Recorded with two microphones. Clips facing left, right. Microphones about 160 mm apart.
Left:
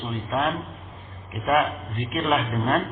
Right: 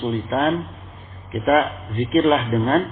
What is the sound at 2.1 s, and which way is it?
Speech, 35° right (ahead or behind).